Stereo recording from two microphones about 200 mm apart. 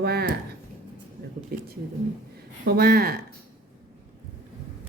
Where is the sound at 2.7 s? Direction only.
50° right (ahead or behind).